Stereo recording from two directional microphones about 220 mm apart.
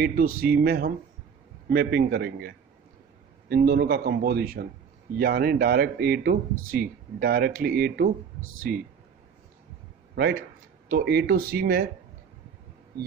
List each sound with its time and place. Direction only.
0.0 s speech: 40° right (ahead or behind)
10.1 s a man's voice: 45° right (ahead or behind)